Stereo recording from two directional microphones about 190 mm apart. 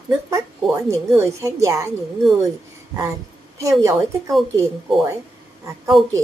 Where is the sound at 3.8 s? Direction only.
15° right (ahead or behind).